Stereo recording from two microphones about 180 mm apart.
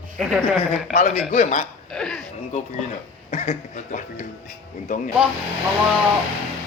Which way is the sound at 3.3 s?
35° left (ahead or behind).